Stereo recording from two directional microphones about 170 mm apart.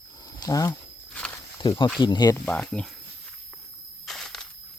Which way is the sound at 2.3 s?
5° left (ahead or behind).